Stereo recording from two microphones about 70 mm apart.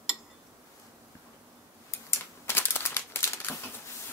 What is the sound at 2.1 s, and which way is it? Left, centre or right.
Typewriter, left.